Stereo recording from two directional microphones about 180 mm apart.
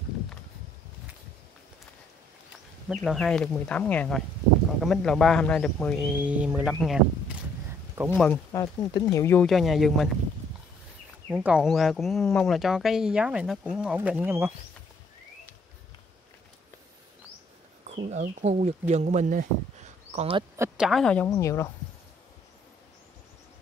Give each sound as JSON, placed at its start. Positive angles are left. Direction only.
{"t": 2.9, "sound": "speech", "side_deg": 0}
{"t": 7.9, "sound": "a sound", "side_deg": -10}
{"t": 8.2, "sound": "speech", "side_deg": 15}
{"t": 9.5, "sound": "speech", "side_deg": 0}
{"t": 11.2, "sound": "speech", "side_deg": -5}
{"t": 17.9, "sound": "a sound", "side_deg": -50}
{"t": 18.2, "sound": "speech", "side_deg": -40}
{"t": 20.5, "sound": "a sound", "side_deg": -15}
{"t": 20.8, "sound": "speech", "side_deg": 0}